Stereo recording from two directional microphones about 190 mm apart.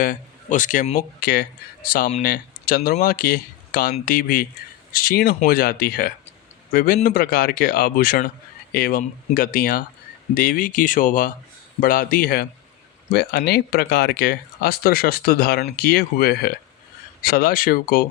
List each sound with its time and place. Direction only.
0.0 s speech: 45° left (ahead or behind)